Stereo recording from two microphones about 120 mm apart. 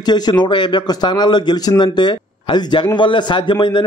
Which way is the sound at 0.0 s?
35° left (ahead or behind).